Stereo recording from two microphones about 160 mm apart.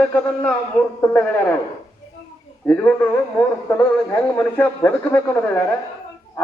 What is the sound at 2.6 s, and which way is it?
Speech, 10° left (ahead or behind).